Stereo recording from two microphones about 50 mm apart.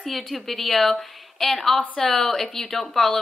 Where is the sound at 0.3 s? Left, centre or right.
Centre.